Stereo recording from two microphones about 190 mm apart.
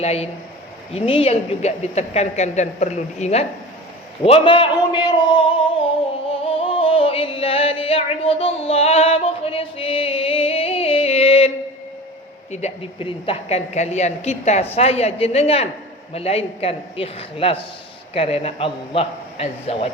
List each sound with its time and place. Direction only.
0.0 s a woman's voice: 35° left (ahead or behind)
6.4 s music: 30° left (ahead or behind)
12.5 s a woman's voice: 35° left (ahead or behind)